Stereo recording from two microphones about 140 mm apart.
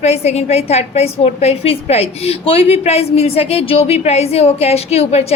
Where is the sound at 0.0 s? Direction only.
50° left (ahead or behind).